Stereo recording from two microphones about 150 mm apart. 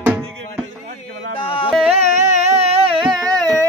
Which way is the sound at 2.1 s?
50° right (ahead or behind).